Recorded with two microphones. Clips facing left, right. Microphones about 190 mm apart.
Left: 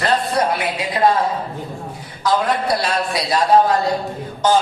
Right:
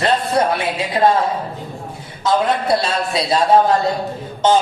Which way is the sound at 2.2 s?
25° right (ahead or behind).